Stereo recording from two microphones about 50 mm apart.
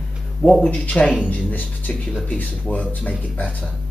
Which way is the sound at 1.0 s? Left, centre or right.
Left.